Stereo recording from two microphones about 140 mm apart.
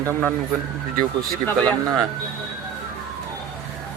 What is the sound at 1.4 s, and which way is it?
Speech, 10° left (ahead or behind).